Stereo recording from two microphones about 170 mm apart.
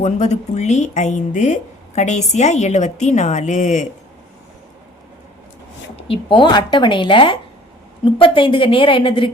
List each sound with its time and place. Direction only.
0.0 s a woman's voice: 40° left (ahead or behind)
6.1 s a woman's voice: 30° left (ahead or behind)